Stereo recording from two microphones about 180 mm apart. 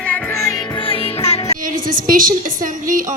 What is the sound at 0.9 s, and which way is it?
Music, 35° left (ahead or behind).